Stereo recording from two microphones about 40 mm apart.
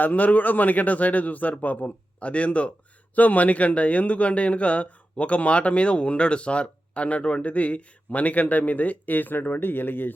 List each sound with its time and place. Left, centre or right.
0.0 s speech: left